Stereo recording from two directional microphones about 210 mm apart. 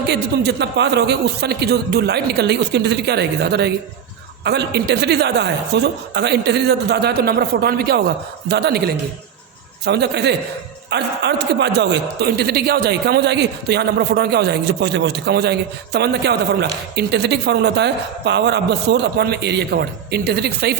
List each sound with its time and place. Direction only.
0.1 s a man's voice: 55° right (ahead or behind)